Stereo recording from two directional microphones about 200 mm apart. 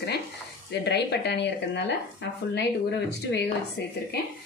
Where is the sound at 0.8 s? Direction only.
55° left (ahead or behind).